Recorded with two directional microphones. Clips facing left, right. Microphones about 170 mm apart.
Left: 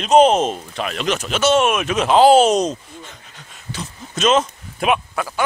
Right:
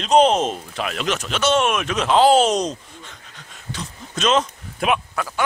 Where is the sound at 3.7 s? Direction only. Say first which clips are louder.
Left 1 dB; 5° left (ahead or behind).